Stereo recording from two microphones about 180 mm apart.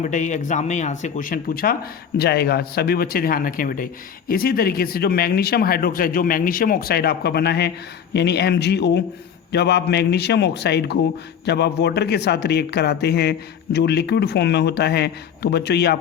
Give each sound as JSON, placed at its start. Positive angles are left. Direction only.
{"t": 0.0, "sound": "speech", "side_deg": 45}